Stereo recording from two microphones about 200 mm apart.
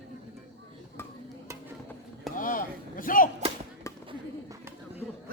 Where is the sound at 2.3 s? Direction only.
45° left (ahead or behind).